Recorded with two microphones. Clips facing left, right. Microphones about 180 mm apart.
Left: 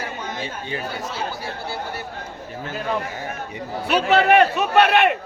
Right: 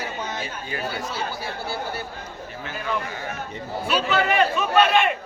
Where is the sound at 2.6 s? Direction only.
45° left (ahead or behind).